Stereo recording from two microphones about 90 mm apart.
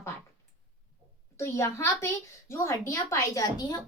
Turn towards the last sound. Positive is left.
turn(degrees=40)  # may be behind; listen again after turning